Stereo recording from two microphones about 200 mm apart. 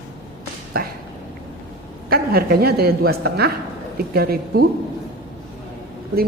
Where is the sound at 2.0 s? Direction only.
50° right (ahead or behind).